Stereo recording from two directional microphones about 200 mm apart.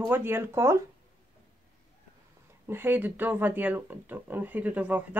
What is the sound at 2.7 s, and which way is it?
Speech, 10° right (ahead or behind).